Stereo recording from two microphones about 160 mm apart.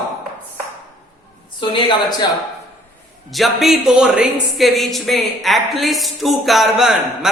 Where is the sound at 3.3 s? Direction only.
Centre (ahead or behind).